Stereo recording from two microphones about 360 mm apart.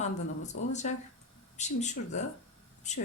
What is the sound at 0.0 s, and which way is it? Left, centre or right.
Speech, centre.